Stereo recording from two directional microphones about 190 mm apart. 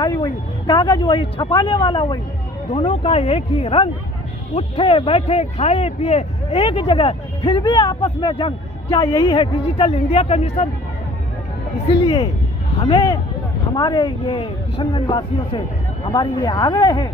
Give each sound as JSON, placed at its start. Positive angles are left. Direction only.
{"t": 0.0, "sound": "speech", "side_deg": 20}
{"t": 12.0, "sound": "speech", "side_deg": 25}